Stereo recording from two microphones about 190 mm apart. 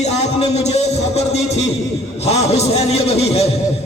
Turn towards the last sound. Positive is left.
turn(degrees=35)  # may be behind; listen again after turning